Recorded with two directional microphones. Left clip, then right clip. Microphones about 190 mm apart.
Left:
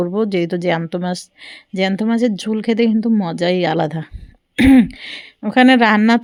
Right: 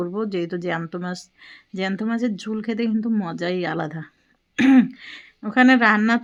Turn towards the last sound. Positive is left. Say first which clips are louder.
# left 4 dB
turn(degrees=40)  # may be behind; listen again after turning